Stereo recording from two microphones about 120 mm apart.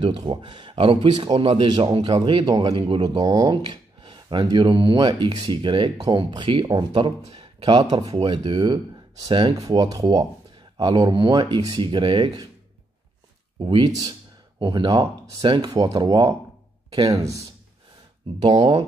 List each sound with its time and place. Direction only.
0.0 s speech: 40° right (ahead or behind)
7.3 s a sound: 45° right (ahead or behind)
8.0 s speech: 35° right (ahead or behind)
9.6 s speech: 30° right (ahead or behind)
13.6 s speech: 40° right (ahead or behind)
18.4 s speech: 40° right (ahead or behind)